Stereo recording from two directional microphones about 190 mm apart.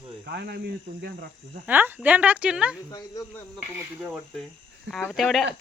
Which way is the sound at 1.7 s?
10° right (ahead or behind).